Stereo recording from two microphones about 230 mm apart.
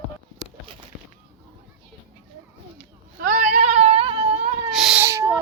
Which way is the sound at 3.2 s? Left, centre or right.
Right.